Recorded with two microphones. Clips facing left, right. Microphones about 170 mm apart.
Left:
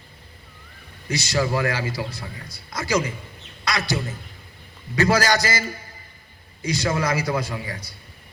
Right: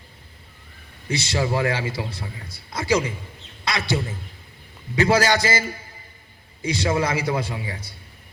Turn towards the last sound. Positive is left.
turn(degrees=-25)  # may be behind; listen again after turning